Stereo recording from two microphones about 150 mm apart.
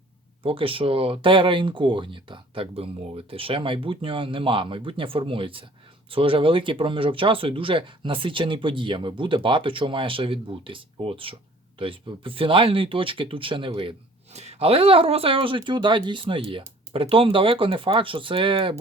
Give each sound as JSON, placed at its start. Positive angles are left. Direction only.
{"t": 0.4, "sound": "speech", "side_deg": -35}